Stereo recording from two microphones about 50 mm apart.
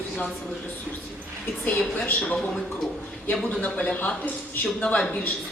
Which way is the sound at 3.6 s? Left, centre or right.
Left.